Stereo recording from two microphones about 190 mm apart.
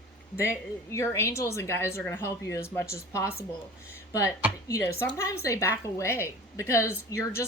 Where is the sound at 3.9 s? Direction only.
15° left (ahead or behind).